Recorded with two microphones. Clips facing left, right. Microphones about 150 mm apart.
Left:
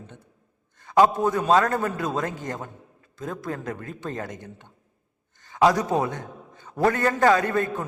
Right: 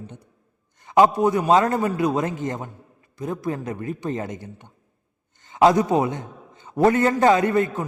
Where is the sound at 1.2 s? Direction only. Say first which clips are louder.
Right 3 dB; 15° right (ahead or behind).